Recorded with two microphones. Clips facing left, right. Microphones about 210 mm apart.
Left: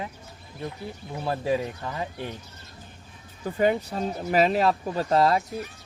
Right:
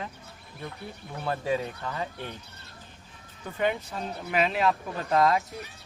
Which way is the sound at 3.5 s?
35° left (ahead or behind).